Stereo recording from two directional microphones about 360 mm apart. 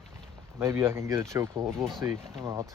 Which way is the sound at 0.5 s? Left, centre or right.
Centre.